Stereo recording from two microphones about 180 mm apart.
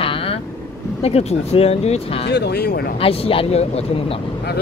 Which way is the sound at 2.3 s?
65° left (ahead or behind).